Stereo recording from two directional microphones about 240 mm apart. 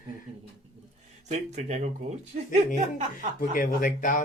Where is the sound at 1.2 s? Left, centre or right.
Right.